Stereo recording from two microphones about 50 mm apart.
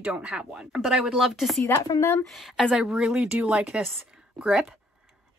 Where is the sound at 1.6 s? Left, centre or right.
Left.